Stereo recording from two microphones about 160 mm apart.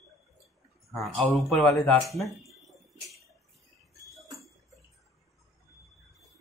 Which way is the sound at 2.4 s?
Centre (ahead or behind).